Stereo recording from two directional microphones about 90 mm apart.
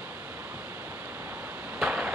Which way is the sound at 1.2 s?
20° right (ahead or behind).